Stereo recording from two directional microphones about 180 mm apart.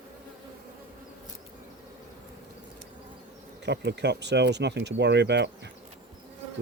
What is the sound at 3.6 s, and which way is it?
Speech, 70° right (ahead or behind).